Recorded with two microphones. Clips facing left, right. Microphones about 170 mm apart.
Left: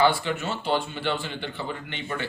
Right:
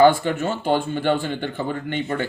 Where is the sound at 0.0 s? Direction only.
50° right (ahead or behind).